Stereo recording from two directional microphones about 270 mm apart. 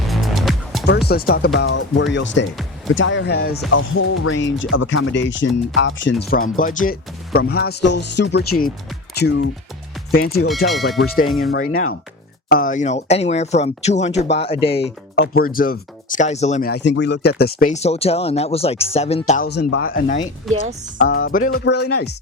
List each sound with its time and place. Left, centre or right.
0.1 s music: centre
1.0 s speech: left
3.7 s speech: left
11.3 s speech: centre
11.5 s speech: left
15.1 s speech: left
19.5 s speech: left